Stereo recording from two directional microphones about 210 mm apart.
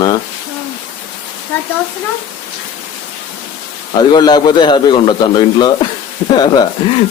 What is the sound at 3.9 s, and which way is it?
A man's voice, 20° left (ahead or behind).